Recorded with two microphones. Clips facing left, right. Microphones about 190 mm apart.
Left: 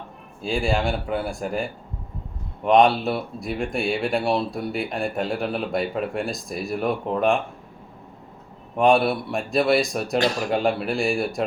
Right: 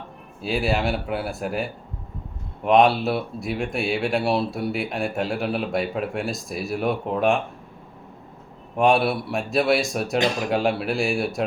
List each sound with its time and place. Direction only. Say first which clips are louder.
0.4 s speech: even; 5° right (ahead or behind)
2.6 s speech: even; centre (ahead or behind)
8.7 s speech: left 1 dB; centre (ahead or behind)